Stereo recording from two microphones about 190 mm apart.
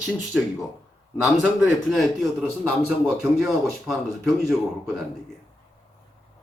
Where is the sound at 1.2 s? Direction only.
Centre (ahead or behind).